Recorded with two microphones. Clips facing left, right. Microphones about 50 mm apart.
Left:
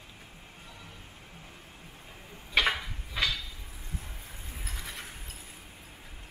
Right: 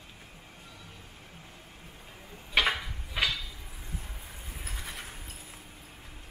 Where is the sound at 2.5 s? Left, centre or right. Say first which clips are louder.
Even; centre.